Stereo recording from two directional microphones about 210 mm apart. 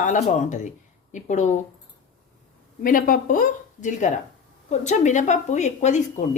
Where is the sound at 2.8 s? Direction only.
40° left (ahead or behind).